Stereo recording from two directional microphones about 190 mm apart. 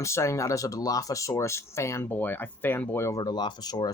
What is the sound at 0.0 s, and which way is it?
Speech, 15° left (ahead or behind).